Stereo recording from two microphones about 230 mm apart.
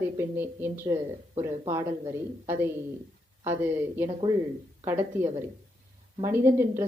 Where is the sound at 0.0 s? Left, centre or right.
Centre.